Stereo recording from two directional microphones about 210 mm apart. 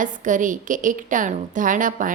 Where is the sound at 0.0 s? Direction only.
40° right (ahead or behind).